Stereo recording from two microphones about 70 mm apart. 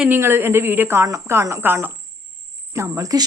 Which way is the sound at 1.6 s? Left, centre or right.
Right.